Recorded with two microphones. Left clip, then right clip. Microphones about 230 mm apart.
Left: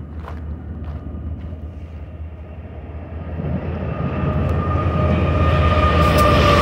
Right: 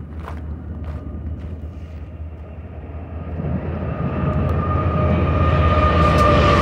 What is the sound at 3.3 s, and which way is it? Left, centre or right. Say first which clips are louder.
Vehicle: even; left.